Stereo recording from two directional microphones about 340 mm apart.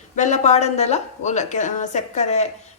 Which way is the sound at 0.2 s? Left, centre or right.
Centre.